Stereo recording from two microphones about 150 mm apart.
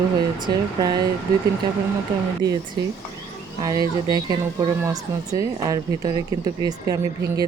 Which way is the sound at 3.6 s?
25° right (ahead or behind).